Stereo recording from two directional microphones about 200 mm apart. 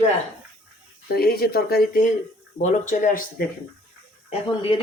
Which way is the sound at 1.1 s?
50° left (ahead or behind).